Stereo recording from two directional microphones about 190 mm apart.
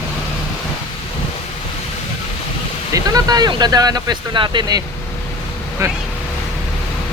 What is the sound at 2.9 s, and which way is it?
Speech, 20° right (ahead or behind).